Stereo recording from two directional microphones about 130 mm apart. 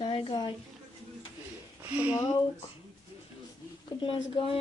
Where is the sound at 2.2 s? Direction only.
30° left (ahead or behind).